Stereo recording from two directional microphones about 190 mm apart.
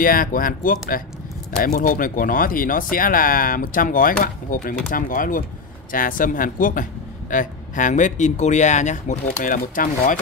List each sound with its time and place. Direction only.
0.0 s speech: 50° left (ahead or behind)